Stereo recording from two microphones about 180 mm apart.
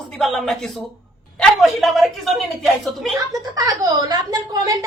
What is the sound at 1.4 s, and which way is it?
A woman's voice, centre (ahead or behind).